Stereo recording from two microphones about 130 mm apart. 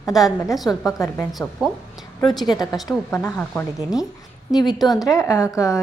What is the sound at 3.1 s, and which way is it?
Speech, 15° left (ahead or behind).